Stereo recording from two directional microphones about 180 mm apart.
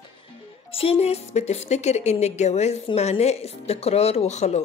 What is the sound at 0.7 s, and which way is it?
A woman's voice, 30° left (ahead or behind).